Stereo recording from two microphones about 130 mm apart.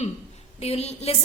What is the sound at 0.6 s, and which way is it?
Speech, 55° left (ahead or behind).